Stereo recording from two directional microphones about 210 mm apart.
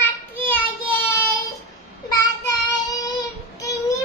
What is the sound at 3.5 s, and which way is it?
Child singing, 15° left (ahead or behind).